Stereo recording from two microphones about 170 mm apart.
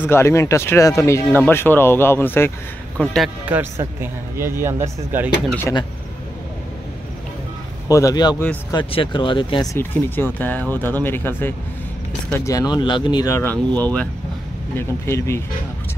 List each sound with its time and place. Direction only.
0.0 s speech: 15° left (ahead or behind)
3.4 s speech: 10° right (ahead or behind)
7.9 s speech: 20° left (ahead or behind)
9.8 s speech: 10° left (ahead or behind)